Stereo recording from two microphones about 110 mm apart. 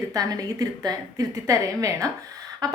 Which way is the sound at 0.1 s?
35° right (ahead or behind).